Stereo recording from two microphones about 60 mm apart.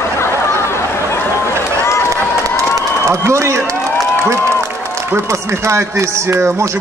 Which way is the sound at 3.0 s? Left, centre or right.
Right.